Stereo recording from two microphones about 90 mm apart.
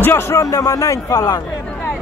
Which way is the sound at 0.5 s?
40° left (ahead or behind).